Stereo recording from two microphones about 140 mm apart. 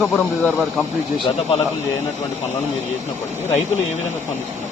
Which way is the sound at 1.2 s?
40° left (ahead or behind).